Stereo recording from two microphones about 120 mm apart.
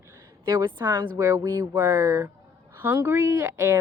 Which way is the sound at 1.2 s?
30° right (ahead or behind).